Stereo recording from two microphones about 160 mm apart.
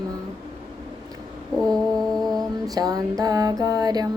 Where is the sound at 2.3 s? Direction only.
25° right (ahead or behind).